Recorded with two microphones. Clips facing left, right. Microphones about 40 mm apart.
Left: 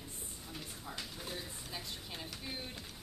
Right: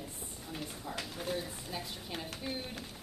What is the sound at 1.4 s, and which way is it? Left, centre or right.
A woman's voice, centre.